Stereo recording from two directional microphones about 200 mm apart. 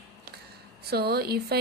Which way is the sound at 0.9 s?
50° right (ahead or behind).